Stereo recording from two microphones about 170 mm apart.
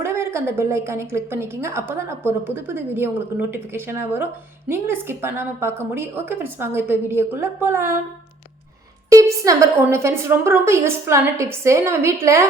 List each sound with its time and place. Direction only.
0.0 s a woman's voice: 15° right (ahead or behind)
9.0 s a woman's voice: 20° right (ahead or behind)